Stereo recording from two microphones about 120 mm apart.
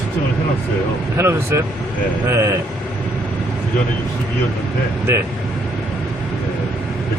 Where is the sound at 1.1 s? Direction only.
20° right (ahead or behind).